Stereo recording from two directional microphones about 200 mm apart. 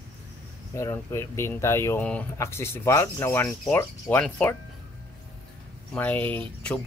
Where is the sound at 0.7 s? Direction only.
15° left (ahead or behind).